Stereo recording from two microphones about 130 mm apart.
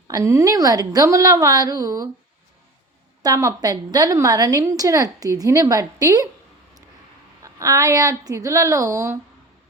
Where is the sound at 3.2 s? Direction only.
25° right (ahead or behind).